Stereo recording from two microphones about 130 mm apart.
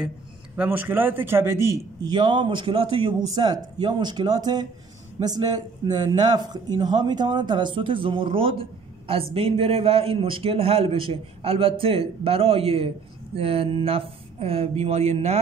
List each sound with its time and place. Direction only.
0.6 s a man's voice: 15° right (ahead or behind)
2.0 s a man's voice: 35° right (ahead or behind); by 15.3 s 55° right (ahead or behind)